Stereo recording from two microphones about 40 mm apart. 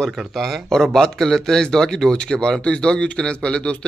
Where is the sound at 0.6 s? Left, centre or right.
Centre.